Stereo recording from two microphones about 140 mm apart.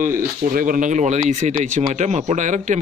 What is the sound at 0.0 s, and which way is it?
Speech, 70° right (ahead or behind).